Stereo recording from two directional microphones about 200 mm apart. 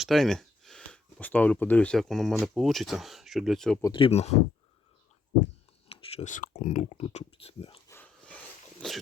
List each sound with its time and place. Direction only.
0.0 s speech: centre (ahead or behind)
3.8 s speech: 15° left (ahead or behind)
4.0 s speech: 30° left (ahead or behind)
5.9 s speech: 30° left (ahead or behind)
7.9 s a sound: 10° left (ahead or behind)
8.8 s speech: 5° left (ahead or behind)